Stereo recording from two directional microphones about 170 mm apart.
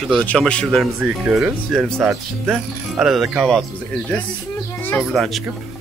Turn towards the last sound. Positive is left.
turn(degrees=0)  # may be behind; listen again after turning